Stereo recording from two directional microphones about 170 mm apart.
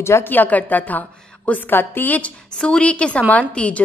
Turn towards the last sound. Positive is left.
turn(degrees=10)  # may be behind; listen again after turning